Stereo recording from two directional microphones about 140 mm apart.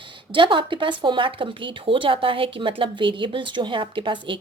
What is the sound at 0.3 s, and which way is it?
Speech, 35° right (ahead or behind).